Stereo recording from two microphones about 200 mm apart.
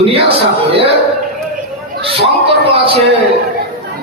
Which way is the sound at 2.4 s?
30° right (ahead or behind).